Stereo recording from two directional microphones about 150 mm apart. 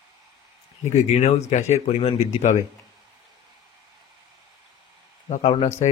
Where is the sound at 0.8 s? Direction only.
50° left (ahead or behind).